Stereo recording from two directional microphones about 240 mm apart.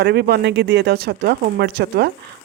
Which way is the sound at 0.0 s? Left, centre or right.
Right.